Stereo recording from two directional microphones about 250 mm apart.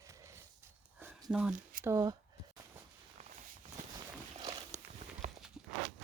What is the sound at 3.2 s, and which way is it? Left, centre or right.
Walk, right.